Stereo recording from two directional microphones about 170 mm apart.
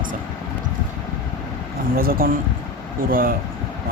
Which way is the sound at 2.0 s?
60° right (ahead or behind).